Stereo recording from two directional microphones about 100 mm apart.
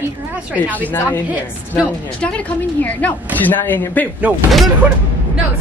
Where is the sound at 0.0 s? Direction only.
15° right (ahead or behind).